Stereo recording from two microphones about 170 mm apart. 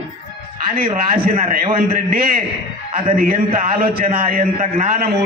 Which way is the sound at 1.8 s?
55° right (ahead or behind).